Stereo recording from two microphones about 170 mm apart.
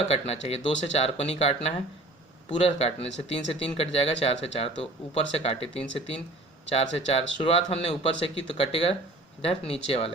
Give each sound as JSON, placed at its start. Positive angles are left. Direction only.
{"t": 0.0, "sound": "speech", "side_deg": 35}